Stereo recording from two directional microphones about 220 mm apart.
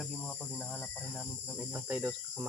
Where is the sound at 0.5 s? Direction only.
Centre (ahead or behind).